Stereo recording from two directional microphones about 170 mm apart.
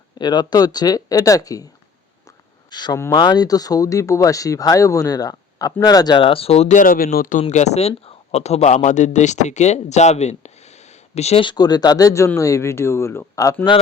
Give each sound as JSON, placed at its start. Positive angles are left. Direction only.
{"t": 0.2, "sound": "speech", "side_deg": 25}
{"t": 2.6, "sound": "speech", "side_deg": 25}